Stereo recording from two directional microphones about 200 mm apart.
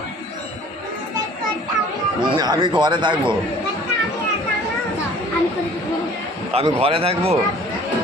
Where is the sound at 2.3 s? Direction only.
20° right (ahead or behind).